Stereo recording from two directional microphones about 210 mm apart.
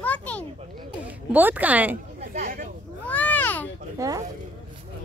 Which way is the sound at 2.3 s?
40° right (ahead or behind).